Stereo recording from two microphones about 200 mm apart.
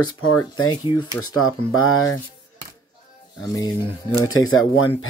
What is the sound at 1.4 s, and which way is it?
Speech, 90° left.